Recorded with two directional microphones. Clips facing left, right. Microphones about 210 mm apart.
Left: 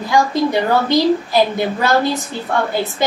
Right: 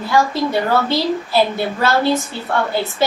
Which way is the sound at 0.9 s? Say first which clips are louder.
Left 4 dB; 15° left (ahead or behind).